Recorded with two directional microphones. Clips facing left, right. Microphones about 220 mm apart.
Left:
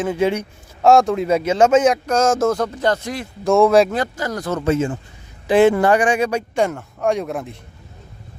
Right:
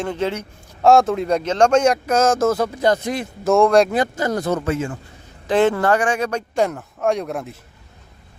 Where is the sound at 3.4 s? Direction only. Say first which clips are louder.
Left 1 dB; centre (ahead or behind).